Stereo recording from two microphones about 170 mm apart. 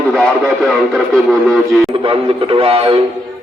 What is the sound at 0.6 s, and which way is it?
Speech, centre (ahead or behind).